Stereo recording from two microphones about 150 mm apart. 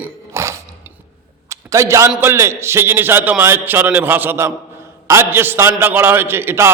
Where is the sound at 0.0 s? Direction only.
20° right (ahead or behind).